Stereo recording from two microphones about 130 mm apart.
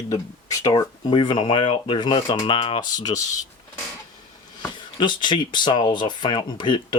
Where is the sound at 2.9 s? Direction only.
30° left (ahead or behind).